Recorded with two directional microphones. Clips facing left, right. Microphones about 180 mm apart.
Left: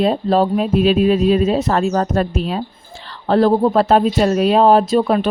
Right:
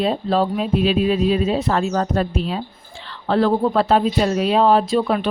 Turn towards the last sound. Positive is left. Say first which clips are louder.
# left 4 dB
turn(degrees=45)  # may be behind; listen again after turning